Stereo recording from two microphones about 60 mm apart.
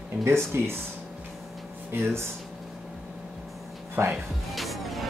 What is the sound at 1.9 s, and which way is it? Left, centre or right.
Speech, right.